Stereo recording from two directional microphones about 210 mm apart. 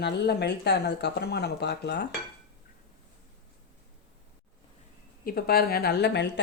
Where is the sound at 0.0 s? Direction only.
50° left (ahead or behind).